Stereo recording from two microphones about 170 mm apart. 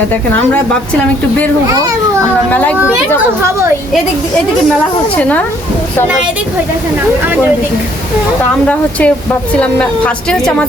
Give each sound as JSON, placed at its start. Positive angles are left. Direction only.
{"t": 2.5, "sound": "a woman's voice", "side_deg": 10}
{"t": 5.2, "sound": "a woman's voice", "side_deg": 10}
{"t": 8.6, "sound": "a woman's voice", "side_deg": 10}